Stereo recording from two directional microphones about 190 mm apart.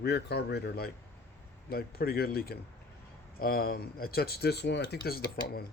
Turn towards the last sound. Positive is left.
turn(degrees=55)  # may be behind; listen again after turning